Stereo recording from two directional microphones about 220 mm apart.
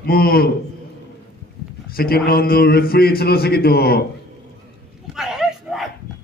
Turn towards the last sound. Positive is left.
turn(degrees=0)  # may be behind; listen again after turning